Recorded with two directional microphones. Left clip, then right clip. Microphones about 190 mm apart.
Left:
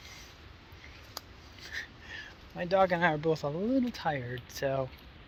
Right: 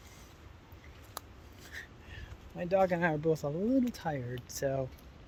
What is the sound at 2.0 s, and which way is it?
Speech, 5° right (ahead or behind).